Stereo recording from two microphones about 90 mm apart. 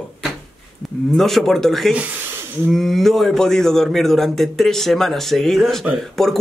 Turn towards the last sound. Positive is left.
turn(degrees=5)  # may be behind; listen again after turning